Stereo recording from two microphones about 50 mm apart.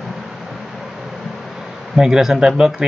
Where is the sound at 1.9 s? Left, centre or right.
Centre.